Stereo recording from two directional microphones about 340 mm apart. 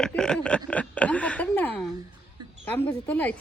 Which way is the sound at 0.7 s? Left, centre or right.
Centre.